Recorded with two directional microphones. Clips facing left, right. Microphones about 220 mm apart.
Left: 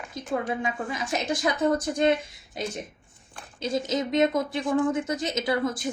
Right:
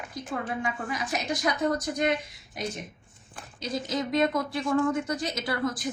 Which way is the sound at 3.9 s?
20° left (ahead or behind).